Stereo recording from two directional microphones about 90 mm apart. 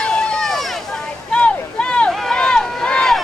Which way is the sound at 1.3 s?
15° left (ahead or behind).